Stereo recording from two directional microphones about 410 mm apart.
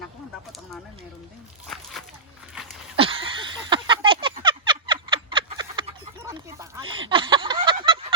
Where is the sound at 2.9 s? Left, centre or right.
Centre.